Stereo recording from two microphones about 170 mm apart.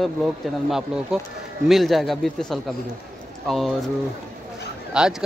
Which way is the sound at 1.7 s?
Centre (ahead or behind).